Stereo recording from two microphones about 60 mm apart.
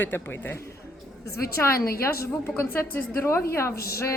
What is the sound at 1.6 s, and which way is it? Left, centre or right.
A woman's voice, left.